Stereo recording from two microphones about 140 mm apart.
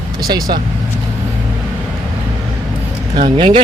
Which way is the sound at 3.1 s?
35° right (ahead or behind).